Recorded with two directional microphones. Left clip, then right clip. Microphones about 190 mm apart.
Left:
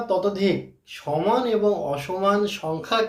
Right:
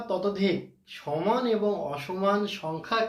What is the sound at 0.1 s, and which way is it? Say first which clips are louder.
Speech: left 5 dB; 10° left (ahead or behind).